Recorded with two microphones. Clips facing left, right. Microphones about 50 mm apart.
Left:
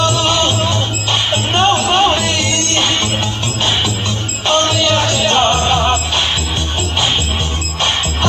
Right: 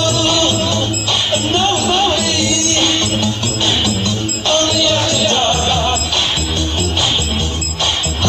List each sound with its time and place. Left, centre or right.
0.0 s music: centre